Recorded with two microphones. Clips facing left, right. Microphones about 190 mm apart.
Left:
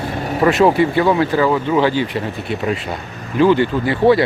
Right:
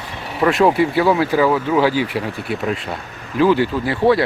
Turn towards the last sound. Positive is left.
turn(degrees=0)  # may be behind; listen again after turning